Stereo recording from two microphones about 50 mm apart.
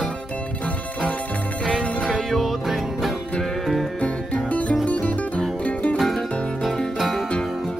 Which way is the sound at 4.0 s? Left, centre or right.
Left.